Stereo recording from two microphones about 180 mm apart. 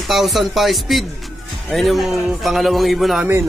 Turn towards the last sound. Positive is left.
turn(degrees=0)  # may be behind; listen again after turning